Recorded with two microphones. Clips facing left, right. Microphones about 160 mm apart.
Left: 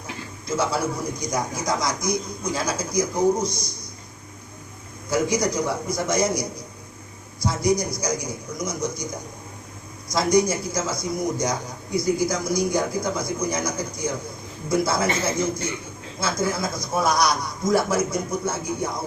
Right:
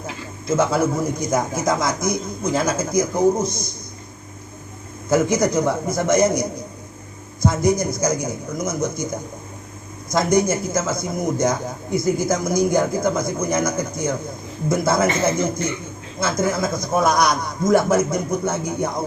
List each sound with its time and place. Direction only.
0.4 s a man's voice: 50° right (ahead or behind)
5.0 s a man's voice: 50° right (ahead or behind)
7.4 s a man's voice: 50° right (ahead or behind)
10.1 s a man's voice: 55° right (ahead or behind)